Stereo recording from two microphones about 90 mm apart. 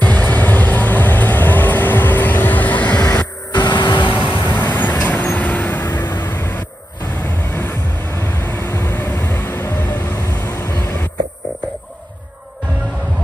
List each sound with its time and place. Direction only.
0.0 s vehicle: 15° left (ahead or behind)
3.5 s vehicle: 55° left (ahead or behind)
4.4 s vehicle: 20° left (ahead or behind)
5.9 s vehicle: 50° left (ahead or behind)
6.3 s a sound: 30° left (ahead or behind)
7.2 s vehicle: 25° left (ahead or behind)
10.1 s vehicle: 40° left (ahead or behind)
10.4 s vehicle: 30° left (ahead or behind)